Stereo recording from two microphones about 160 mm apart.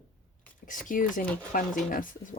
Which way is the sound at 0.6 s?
55° left (ahead or behind).